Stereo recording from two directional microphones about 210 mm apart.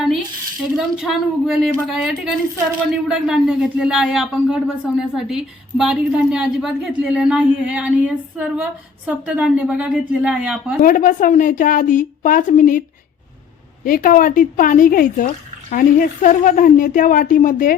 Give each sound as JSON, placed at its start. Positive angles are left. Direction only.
{"t": 0.8, "sound": "speech", "side_deg": 0}
{"t": 10.8, "sound": "a woman's voice", "side_deg": 40}
{"t": 13.8, "sound": "a woman's voice", "side_deg": 40}